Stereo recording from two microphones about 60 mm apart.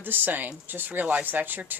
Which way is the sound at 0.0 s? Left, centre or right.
Right.